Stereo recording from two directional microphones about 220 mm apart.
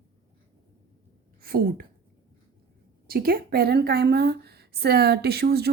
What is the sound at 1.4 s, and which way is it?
Speech, 45° right (ahead or behind).